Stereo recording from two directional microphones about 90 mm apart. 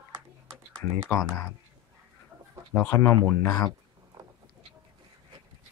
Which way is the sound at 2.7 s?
25° left (ahead or behind).